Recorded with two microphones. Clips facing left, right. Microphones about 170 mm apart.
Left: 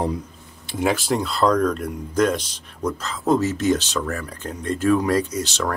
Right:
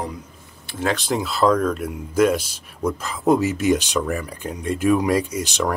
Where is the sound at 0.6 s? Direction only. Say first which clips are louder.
Left 2 dB; 15° left (ahead or behind).